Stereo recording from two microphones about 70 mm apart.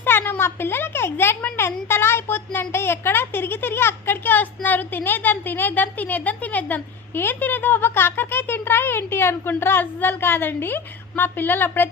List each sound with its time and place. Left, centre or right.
0.0 s a woman's voice: left